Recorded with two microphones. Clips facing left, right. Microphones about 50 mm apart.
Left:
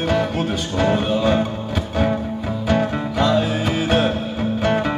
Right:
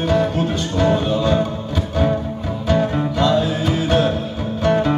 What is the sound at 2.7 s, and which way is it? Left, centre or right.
Music, centre.